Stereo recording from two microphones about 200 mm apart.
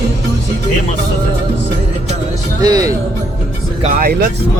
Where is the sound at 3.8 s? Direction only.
35° right (ahead or behind).